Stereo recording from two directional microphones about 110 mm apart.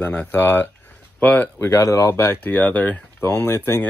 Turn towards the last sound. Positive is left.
turn(degrees=20)  # may be behind; listen again after turning